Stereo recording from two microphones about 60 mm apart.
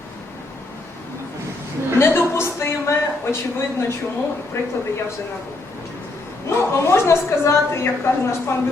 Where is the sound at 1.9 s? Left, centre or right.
Left.